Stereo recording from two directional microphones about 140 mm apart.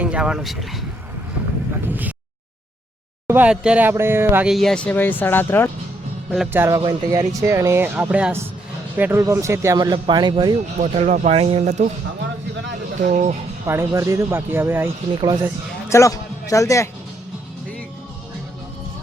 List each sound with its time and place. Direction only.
0.0 s speech: 5° right (ahead or behind)
1.9 s speech: 10° right (ahead or behind)
3.2 s speech: 10° right (ahead or behind)
4.4 s speech: centre (ahead or behind)
6.5 s speech: 20° right (ahead or behind)
9.7 s speech: 30° right (ahead or behind)
10.8 s speech: 55° right (ahead or behind)
11.3 s speech: 50° right (ahead or behind)
13.0 s speech: 55° right (ahead or behind)
13.7 s speech: 20° right (ahead or behind)
15.2 s speech: 35° right (ahead or behind)
15.9 s speech: 20° left (ahead or behind)